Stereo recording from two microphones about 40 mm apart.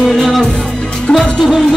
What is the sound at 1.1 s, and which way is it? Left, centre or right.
Music, left.